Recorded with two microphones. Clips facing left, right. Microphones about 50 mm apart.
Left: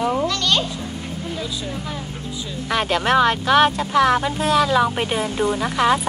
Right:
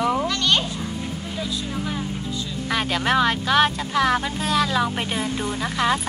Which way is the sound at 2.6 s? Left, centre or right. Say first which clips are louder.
Left 3 dB; centre.